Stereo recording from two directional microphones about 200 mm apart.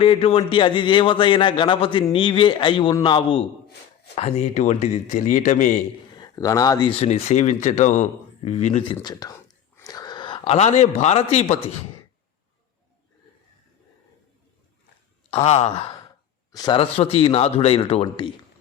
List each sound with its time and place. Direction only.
0.0 s a man's voice: 25° left (ahead or behind)
6.1 s speech: 15° left (ahead or behind)
7.0 s speech: 35° left (ahead or behind)
9.0 s a man's voice: 20° left (ahead or behind)
15.3 s speech: 30° left (ahead or behind)
16.5 s a man's voice: 20° left (ahead or behind)